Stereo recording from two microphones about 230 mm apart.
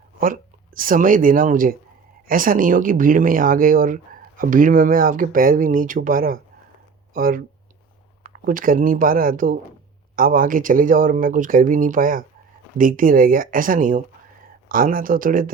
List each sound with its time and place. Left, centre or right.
0.2 s speech: right